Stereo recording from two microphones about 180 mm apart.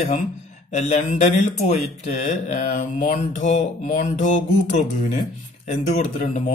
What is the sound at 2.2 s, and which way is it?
Mantra, 40° left (ahead or behind).